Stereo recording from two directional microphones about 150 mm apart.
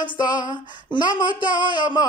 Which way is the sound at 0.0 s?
30° left (ahead or behind).